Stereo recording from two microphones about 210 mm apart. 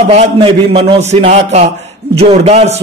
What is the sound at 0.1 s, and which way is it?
A man's voice, 30° right (ahead or behind).